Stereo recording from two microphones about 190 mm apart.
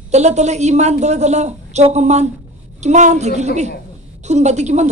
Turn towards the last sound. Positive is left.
turn(degrees=-35)  # may be behind; listen again after turning